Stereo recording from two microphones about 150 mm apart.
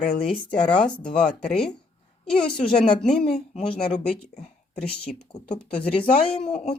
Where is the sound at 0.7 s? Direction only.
5° left (ahead or behind).